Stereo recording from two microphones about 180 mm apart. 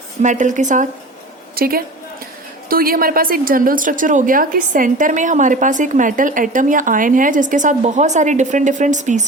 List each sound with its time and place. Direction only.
0.2 s a woman's voice: 45° right (ahead or behind)
1.5 s a woman's voice: 55° right (ahead or behind)